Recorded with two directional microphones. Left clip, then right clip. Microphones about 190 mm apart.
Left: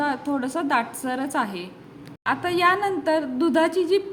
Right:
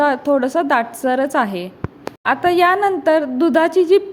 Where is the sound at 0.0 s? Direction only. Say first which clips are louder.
Right 10 dB; 30° right (ahead or behind).